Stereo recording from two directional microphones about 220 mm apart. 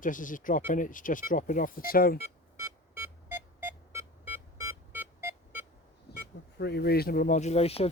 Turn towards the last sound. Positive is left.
turn(degrees=25)  # may be behind; listen again after turning